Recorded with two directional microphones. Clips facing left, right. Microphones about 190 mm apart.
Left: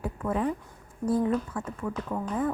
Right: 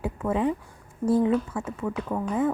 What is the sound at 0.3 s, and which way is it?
Speech, 25° right (ahead or behind).